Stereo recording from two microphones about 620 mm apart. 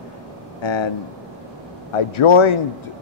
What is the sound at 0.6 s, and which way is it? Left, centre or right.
Speech, left.